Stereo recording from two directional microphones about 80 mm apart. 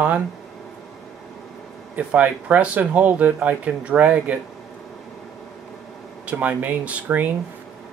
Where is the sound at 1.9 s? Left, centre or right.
Centre.